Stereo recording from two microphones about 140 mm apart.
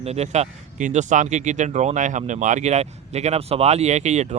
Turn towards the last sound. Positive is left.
turn(degrees=-55)  # may be behind; listen again after turning